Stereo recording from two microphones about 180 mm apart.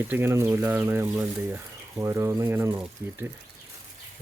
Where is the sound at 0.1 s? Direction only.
15° right (ahead or behind).